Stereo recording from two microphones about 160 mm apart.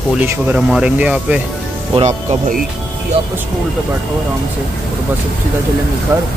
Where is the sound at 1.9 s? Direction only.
40° right (ahead or behind).